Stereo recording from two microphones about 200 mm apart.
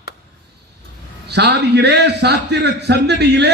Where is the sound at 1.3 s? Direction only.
60° right (ahead or behind).